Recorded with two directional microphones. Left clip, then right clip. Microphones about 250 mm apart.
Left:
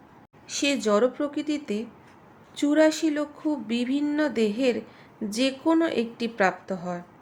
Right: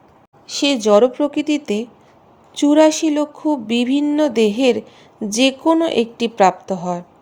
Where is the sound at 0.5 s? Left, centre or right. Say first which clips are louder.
Right 10 dB; right.